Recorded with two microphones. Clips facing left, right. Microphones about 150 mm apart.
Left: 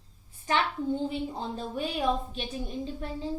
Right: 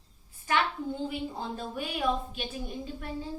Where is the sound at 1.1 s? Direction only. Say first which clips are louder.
Left 2 dB; 30° left (ahead or behind).